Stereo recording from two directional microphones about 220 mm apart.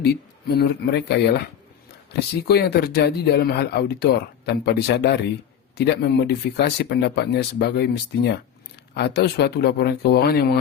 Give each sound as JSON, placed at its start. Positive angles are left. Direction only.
{"t": 0.0, "sound": "speech", "side_deg": 45}